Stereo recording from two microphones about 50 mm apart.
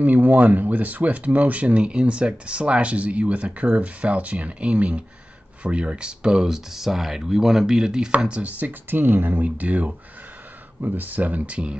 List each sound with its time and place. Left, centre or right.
0.0 s speech: right; by 8.1 s centre
8.2 s speech: right
9.0 s speech: right
9.4 s speech: right